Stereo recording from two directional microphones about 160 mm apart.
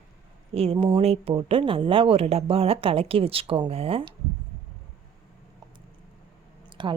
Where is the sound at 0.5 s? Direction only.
35° right (ahead or behind).